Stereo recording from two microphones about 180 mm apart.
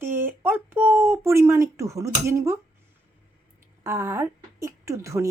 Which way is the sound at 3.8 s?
15° right (ahead or behind).